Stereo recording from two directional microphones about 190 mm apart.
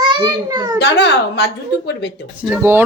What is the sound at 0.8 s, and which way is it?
A child's voice, 65° left (ahead or behind).